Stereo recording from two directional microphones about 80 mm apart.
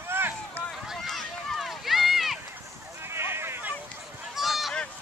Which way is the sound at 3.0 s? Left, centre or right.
Right.